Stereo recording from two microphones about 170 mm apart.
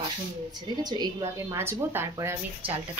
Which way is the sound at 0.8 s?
25° right (ahead or behind).